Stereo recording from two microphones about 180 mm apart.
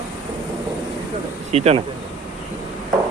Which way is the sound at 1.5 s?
35° right (ahead or behind).